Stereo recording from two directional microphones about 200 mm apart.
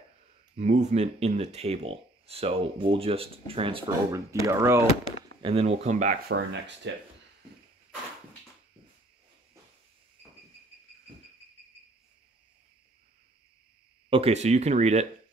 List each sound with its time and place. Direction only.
0.6 s speech: 35° right (ahead or behind)
4.3 s speech: 15° right (ahead or behind)
5.4 s speech: 30° right (ahead or behind)
6.3 s speech: 65° right (ahead or behind)
14.1 s speech: 30° right (ahead or behind)